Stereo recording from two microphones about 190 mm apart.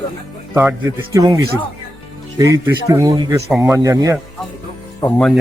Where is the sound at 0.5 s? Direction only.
10° right (ahead or behind).